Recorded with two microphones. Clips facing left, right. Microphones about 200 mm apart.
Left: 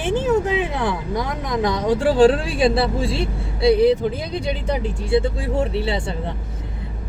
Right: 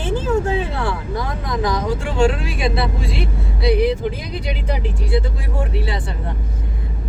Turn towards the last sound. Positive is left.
turn(degrees=25)  # may be behind; listen again after turning